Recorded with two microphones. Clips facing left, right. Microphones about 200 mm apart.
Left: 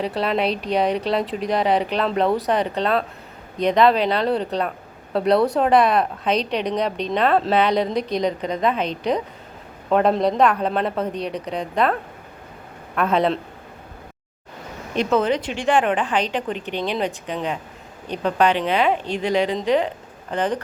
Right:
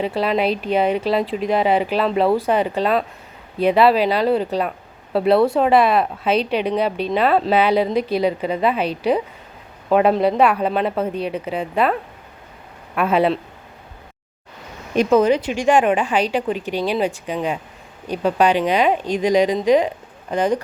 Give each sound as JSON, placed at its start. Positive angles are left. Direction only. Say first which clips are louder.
{"t": 0.0, "sound": "a woman's voice", "louder": "right 2 dB", "side_deg": 0}
{"t": 13.0, "sound": "speech", "louder": "right 2 dB", "side_deg": -5}
{"t": 15.1, "sound": "speech", "louder": "right 5 dB", "side_deg": -10}